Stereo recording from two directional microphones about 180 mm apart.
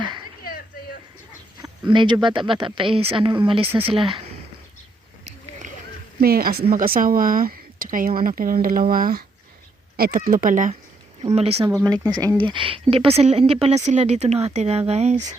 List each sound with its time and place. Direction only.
1.9 s speech: 25° right (ahead or behind)
6.1 s speech: 55° right (ahead or behind)
11.2 s speech: 35° right (ahead or behind)
11.7 s speech: 20° right (ahead or behind); by 15.2 s 35° right (ahead or behind)